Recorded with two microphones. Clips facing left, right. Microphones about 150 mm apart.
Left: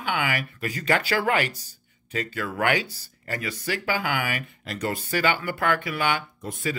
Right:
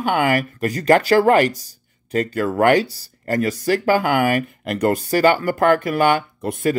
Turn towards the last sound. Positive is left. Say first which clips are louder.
# right 10 dB
turn(degrees=-60)  # may be behind; listen again after turning